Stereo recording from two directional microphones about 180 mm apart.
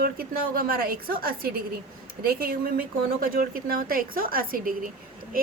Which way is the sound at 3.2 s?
50° right (ahead or behind).